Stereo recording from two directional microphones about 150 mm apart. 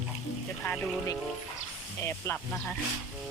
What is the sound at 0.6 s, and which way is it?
Music, 5° left (ahead or behind).